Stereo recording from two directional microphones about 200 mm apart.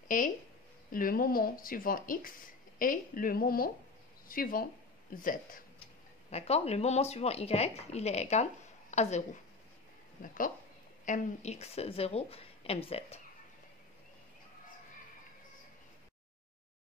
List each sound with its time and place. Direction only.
0.1 s speech: 40° left (ahead or behind)
6.3 s speech: 30° left (ahead or behind)